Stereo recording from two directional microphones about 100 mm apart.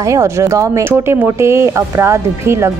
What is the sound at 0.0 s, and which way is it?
A woman's voice, 30° right (ahead or behind).